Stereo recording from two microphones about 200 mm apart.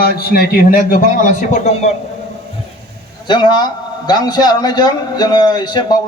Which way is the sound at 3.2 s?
25° left (ahead or behind).